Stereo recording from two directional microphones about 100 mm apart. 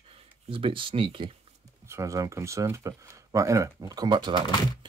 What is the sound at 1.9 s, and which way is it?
Speech, 35° right (ahead or behind).